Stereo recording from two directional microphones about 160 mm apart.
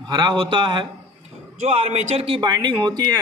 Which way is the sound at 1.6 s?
45° right (ahead or behind).